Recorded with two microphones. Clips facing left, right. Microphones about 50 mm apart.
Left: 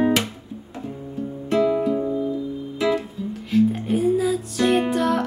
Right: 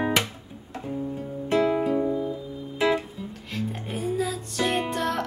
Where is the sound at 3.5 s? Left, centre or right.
Centre.